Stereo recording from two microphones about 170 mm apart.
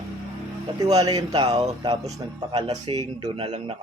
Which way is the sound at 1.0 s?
20° right (ahead or behind).